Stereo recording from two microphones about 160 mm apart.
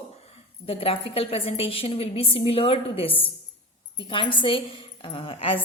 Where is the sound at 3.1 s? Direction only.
10° left (ahead or behind).